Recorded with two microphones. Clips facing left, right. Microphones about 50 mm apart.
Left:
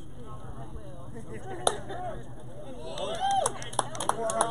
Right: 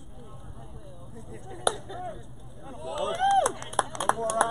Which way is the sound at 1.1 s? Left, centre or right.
Left.